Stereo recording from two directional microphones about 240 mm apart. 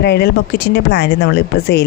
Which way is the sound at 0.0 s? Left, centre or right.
Left.